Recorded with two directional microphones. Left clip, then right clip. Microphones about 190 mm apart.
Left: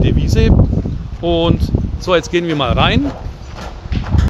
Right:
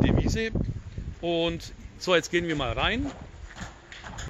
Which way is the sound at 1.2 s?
20° right (ahead or behind).